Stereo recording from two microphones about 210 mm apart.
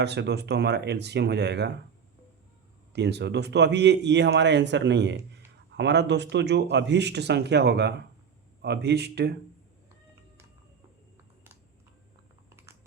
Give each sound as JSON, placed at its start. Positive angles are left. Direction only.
{"t": 0.0, "sound": "speech", "side_deg": -55}
{"t": 2.9, "sound": "speech", "side_deg": -55}